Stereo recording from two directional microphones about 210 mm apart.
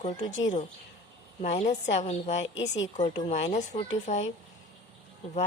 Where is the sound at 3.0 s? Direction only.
25° left (ahead or behind).